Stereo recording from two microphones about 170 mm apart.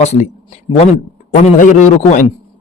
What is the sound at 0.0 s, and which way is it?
Speech, 40° left (ahead or behind).